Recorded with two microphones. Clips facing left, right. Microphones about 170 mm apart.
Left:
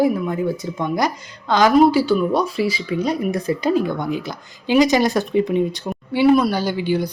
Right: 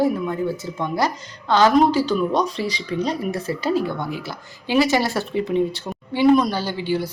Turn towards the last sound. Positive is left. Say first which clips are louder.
# left 3 dB
turn(degrees=15)  # may be behind; listen again after turning